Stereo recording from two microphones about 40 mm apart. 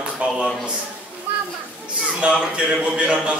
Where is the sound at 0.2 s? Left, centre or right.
Right.